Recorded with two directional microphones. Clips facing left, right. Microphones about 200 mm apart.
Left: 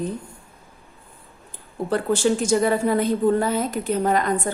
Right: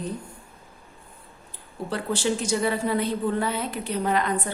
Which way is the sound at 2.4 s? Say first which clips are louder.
Left 5 dB; 50° left (ahead or behind).